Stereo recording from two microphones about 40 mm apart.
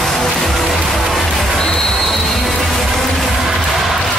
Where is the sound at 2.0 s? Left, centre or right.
Centre.